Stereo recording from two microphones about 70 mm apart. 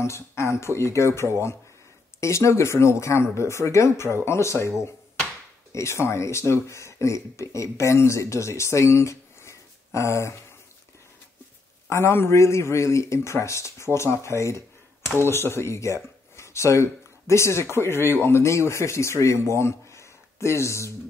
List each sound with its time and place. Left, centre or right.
0.0 s speech: left
5.7 s speech: left
11.9 s speech: left
19.5 s a sound: left